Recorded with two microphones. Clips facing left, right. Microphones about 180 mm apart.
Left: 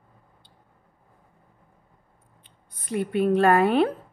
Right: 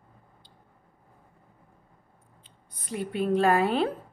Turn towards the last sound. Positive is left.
turn(degrees=60)  # may be behind; listen again after turning